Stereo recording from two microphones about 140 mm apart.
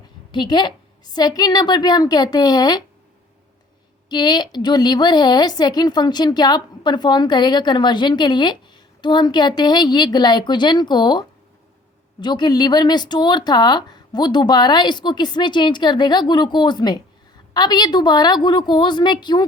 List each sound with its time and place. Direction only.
0.3 s a woman's voice: 30° left (ahead or behind)
4.1 s a woman's voice: 30° left (ahead or behind)